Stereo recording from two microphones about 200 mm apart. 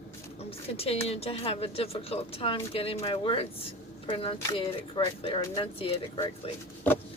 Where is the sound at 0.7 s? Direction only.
30° left (ahead or behind).